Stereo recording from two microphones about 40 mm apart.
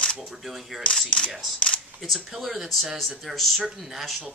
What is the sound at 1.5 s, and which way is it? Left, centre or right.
Speech, left.